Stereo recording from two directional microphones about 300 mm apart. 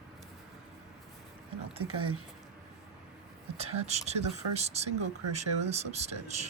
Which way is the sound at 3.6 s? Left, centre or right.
Right.